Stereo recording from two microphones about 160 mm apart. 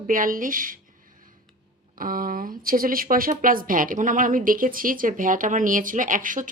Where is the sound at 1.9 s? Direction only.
60° right (ahead or behind).